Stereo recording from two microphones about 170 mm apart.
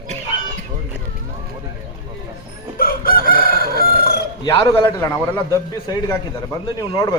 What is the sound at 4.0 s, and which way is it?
Chicken, 65° left (ahead or behind).